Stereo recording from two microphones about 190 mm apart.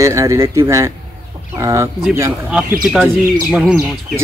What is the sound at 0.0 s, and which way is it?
Speech, 15° right (ahead or behind).